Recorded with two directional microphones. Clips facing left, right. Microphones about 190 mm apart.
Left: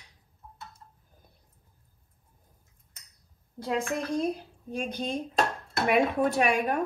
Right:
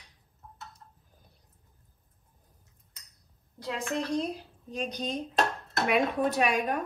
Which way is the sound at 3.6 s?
50° left (ahead or behind).